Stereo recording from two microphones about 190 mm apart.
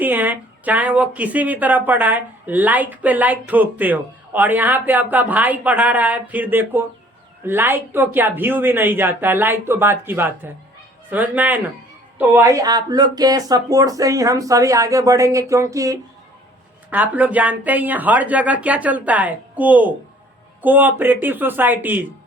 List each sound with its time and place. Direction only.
0.0 s speech: 10° right (ahead or behind)